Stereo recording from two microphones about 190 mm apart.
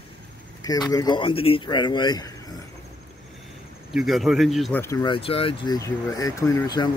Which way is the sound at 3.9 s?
Centre (ahead or behind).